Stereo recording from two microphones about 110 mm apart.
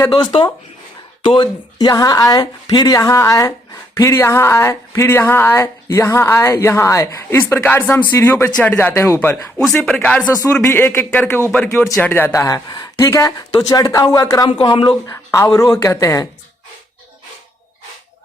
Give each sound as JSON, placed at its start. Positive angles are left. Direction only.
{"t": 0.1, "sound": "speech", "side_deg": 45}
{"t": 9.6, "sound": "speech", "side_deg": 5}
{"t": 10.6, "sound": "speech", "side_deg": 20}
{"t": 12.6, "sound": "speech", "side_deg": 40}
{"t": 14.6, "sound": "speech", "side_deg": 45}
{"t": 15.0, "sound": "speech", "side_deg": 25}